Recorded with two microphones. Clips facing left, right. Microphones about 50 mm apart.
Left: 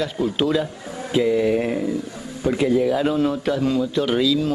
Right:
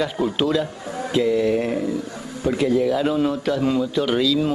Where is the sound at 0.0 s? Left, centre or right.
Centre.